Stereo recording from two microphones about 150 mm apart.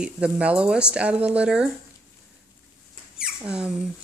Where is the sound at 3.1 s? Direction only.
5° right (ahead or behind).